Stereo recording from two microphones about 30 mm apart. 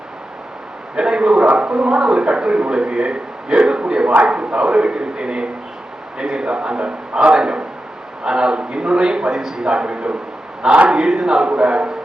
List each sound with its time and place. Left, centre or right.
0.9 s a man's voice: right
9.4 s a man's voice: centre
9.6 s a man's voice: right